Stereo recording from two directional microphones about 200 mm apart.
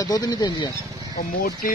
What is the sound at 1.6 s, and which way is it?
Speech, 45° left (ahead or behind).